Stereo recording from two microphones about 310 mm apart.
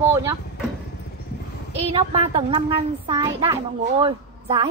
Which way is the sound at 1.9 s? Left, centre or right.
Centre.